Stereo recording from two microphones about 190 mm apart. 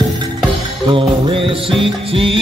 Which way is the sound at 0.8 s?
25° right (ahead or behind).